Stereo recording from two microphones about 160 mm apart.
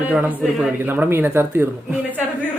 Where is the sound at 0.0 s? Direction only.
10° right (ahead or behind).